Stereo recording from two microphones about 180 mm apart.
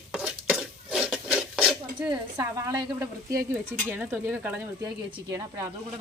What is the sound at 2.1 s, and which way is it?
A woman's voice, 20° right (ahead or behind).